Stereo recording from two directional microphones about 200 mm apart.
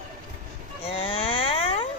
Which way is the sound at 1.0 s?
25° left (ahead or behind).